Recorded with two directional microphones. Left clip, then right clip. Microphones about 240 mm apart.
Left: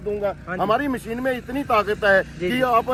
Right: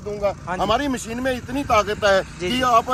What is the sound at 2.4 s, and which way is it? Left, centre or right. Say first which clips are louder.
Speech: even; centre.